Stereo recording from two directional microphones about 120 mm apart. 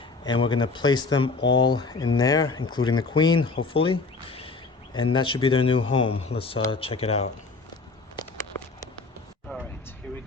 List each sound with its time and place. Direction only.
0.3 s speech: 40° left (ahead or behind)